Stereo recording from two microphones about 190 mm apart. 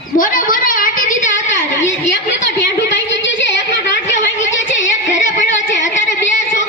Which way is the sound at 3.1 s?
70° left (ahead or behind).